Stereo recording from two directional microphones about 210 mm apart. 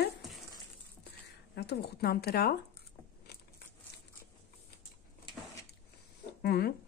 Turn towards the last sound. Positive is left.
turn(degrees=45)  # may be behind; listen again after turning